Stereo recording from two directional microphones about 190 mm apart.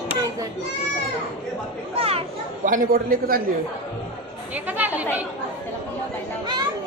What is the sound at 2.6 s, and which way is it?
Speech, 45° right (ahead or behind).